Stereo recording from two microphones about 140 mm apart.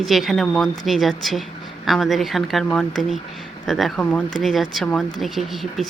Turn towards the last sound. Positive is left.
turn(degrees=0)  # may be behind; listen again after turning